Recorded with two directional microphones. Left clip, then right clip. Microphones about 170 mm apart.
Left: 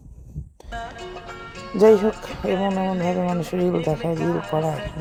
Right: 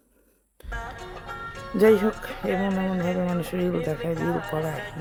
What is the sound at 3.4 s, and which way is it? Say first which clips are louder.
Speech: left 4 dB; 5° left (ahead or behind).